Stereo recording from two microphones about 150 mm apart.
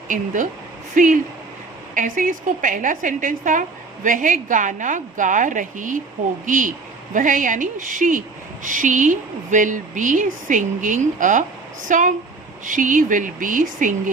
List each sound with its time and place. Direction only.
0.9 s speech: 60° right (ahead or behind)